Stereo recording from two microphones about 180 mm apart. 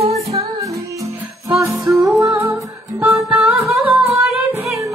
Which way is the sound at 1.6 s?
15° right (ahead or behind).